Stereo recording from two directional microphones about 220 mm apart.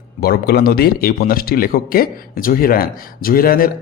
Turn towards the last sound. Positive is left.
turn(degrees=40)  # may be behind; listen again after turning